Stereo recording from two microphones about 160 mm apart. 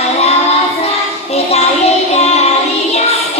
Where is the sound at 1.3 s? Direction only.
40° left (ahead or behind).